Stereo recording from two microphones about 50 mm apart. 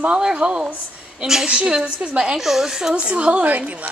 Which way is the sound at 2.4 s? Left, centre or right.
Centre.